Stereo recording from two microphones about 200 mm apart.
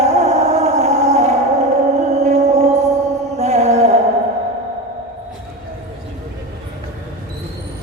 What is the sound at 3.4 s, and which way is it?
Music, 35° right (ahead or behind).